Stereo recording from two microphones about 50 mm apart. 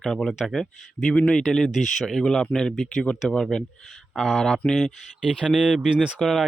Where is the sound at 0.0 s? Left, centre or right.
Centre.